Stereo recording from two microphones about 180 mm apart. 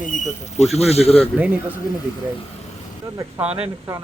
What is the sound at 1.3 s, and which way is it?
Speech, 10° right (ahead or behind).